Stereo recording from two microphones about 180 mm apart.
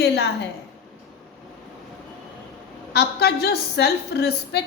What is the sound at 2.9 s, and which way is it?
A woman's voice, 65° left (ahead or behind).